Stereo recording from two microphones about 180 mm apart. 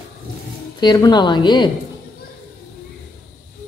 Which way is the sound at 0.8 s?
25° left (ahead or behind).